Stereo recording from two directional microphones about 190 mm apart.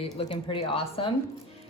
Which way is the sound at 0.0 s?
30° left (ahead or behind).